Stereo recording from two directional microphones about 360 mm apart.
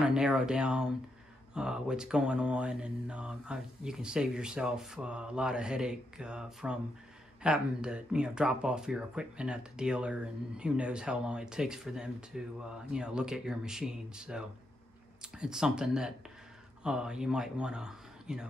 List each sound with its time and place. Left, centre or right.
0.0 s speech: centre